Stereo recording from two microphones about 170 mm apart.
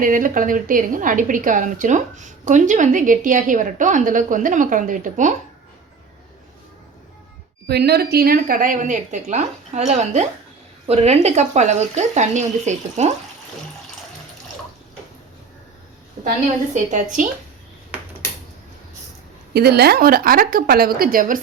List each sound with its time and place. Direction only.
0.0 s a woman's voice: 50° right (ahead or behind)
7.7 s a woman's voice: 70° right (ahead or behind); by 13.1 s 40° right (ahead or behind)
16.7 s a woman's voice: 50° right (ahead or behind)
19.5 s a woman's voice: 70° right (ahead or behind); by 21.4 s 55° right (ahead or behind)